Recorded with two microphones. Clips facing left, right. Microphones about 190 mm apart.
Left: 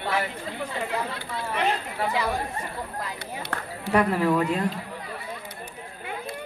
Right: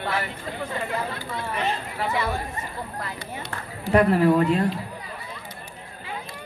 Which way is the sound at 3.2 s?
65° left (ahead or behind).